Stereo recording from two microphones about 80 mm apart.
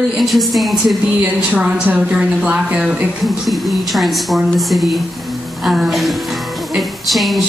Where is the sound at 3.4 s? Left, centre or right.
Centre.